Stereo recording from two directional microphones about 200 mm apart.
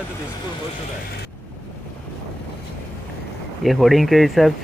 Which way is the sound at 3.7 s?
Centre (ahead or behind).